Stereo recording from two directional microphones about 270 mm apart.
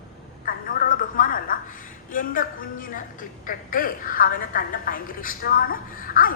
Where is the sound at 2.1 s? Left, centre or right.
Left.